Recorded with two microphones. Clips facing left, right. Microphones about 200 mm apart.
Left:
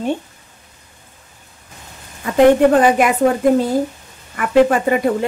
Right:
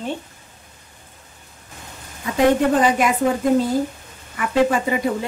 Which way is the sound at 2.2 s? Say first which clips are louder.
Left 6 dB; 55° left (ahead or behind).